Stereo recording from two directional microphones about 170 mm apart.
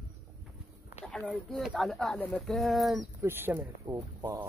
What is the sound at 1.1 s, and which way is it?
Speech, 5° left (ahead or behind).